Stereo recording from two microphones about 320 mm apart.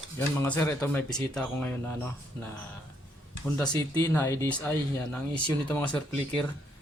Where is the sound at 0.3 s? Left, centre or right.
Centre.